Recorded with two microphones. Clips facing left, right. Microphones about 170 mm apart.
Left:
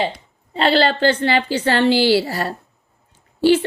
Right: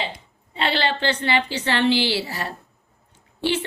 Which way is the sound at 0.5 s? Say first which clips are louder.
Left 7 dB; 40° left (ahead or behind).